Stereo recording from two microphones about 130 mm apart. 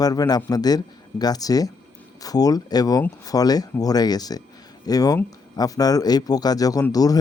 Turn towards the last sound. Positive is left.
turn(degrees=30)  # may be behind; listen again after turning